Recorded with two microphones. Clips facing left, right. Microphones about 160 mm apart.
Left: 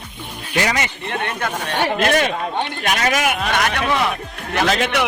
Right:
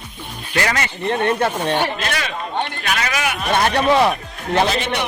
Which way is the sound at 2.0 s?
50° left (ahead or behind).